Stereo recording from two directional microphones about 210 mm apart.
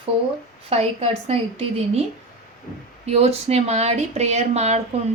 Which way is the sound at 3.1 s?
30° right (ahead or behind).